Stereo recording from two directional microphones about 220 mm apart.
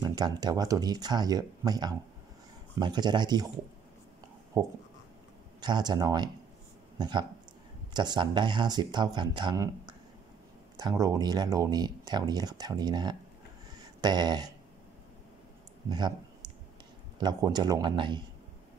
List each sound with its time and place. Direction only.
0.0 s speech: 20° right (ahead or behind)
4.6 s speech: 15° right (ahead or behind)
13.7 s a sound: 20° right (ahead or behind)
15.9 s clicking: 20° right (ahead or behind)
17.2 s speech: 20° right (ahead or behind)